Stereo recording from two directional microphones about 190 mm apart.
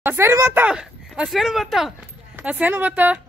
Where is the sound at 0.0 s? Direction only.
10° right (ahead or behind).